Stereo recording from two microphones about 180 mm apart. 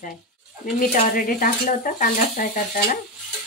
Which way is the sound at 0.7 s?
50° left (ahead or behind).